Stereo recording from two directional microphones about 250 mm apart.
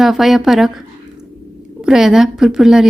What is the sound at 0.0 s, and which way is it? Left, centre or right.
Speech, centre.